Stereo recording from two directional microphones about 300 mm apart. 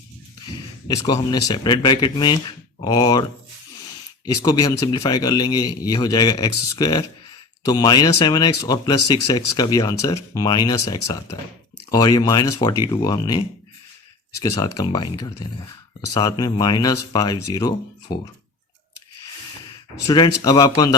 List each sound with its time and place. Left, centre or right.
0.9 s speech: centre
4.3 s speech: centre
14.4 s speech: centre
20.1 s speech: centre